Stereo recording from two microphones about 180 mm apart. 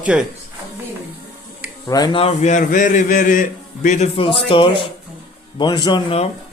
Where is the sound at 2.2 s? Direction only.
40° left (ahead or behind).